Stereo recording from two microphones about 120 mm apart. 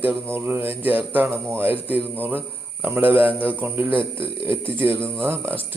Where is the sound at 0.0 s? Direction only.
15° right (ahead or behind).